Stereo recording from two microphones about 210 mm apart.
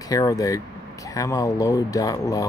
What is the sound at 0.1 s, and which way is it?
Speech, 15° left (ahead or behind).